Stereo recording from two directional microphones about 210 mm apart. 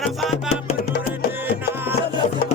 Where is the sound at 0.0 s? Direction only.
Centre (ahead or behind).